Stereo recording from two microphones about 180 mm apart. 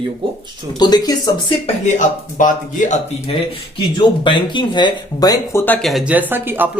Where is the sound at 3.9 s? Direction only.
25° left (ahead or behind).